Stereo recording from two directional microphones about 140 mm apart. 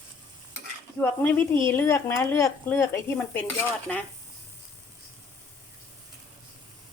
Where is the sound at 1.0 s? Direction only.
15° left (ahead or behind).